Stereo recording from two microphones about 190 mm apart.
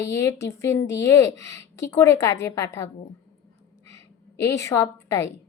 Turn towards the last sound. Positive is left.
turn(degrees=15)  # may be behind; listen again after turning